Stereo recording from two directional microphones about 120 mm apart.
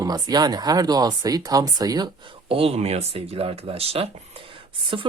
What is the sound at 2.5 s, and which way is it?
Speech, 50° right (ahead or behind).